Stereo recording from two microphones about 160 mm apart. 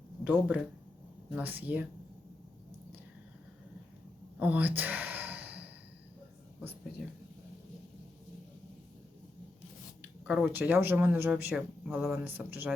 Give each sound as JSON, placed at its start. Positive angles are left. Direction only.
{"t": 0.3, "sound": "speech", "side_deg": -10}
{"t": 4.4, "sound": "sigh", "side_deg": -10}
{"t": 10.2, "sound": "speech", "side_deg": -10}